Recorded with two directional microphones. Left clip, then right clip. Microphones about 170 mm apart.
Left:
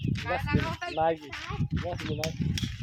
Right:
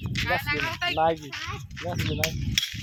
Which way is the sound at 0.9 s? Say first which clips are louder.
Right 2 dB; 30° right (ahead or behind).